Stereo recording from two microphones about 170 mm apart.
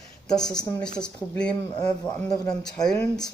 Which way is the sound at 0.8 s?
5° left (ahead or behind).